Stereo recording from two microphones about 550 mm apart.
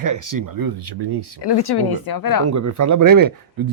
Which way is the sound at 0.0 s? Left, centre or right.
Right.